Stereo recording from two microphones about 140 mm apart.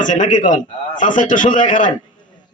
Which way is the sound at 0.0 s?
65° left (ahead or behind).